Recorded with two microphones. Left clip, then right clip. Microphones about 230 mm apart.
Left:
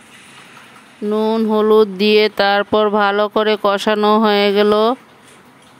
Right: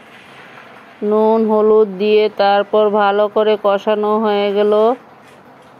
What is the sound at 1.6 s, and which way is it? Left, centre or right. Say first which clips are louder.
Mantra: right 1 dB; left.